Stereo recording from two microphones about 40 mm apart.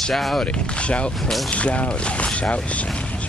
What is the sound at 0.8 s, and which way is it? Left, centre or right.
Speech, left.